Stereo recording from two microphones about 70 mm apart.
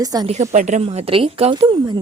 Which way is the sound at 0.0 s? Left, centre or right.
Right.